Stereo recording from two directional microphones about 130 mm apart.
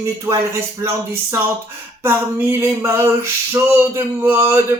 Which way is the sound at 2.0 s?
20° right (ahead or behind).